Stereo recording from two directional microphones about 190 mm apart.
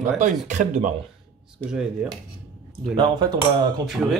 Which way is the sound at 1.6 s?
5° right (ahead or behind).